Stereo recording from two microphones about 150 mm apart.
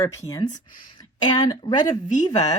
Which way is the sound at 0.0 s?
20° left (ahead or behind).